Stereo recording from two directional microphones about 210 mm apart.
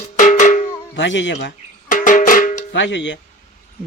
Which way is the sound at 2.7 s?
60° left (ahead or behind).